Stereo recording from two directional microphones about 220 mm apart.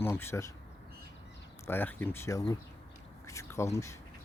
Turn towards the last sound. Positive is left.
turn(degrees=15)  # may be behind; listen again after turning